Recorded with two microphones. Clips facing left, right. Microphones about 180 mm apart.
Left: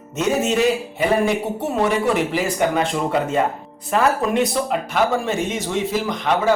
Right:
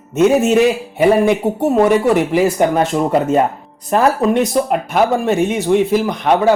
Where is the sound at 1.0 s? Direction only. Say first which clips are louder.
Right 7 dB; 50° right (ahead or behind).